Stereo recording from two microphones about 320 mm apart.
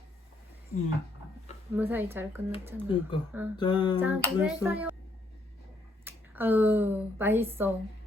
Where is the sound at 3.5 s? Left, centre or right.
Centre.